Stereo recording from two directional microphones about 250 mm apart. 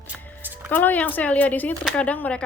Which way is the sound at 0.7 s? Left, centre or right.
Centre.